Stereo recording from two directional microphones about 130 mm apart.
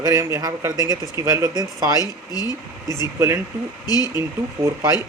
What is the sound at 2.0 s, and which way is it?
Speech, 30° left (ahead or behind).